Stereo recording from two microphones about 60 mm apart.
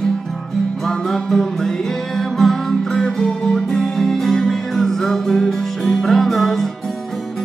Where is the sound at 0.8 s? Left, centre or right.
Centre.